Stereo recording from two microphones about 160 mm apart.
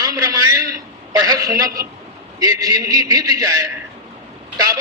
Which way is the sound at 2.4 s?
20° right (ahead or behind).